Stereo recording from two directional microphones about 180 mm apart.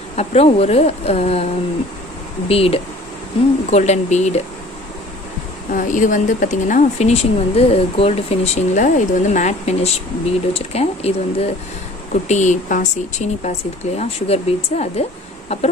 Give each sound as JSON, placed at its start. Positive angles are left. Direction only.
{"t": 0.1, "sound": "speech", "side_deg": 35}
{"t": 5.7, "sound": "speech", "side_deg": 45}